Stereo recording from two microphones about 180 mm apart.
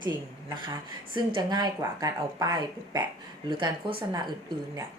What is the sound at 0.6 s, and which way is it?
Speech, 25° right (ahead or behind).